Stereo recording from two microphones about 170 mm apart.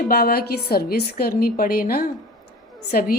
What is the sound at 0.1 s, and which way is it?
A woman's voice, 65° left (ahead or behind).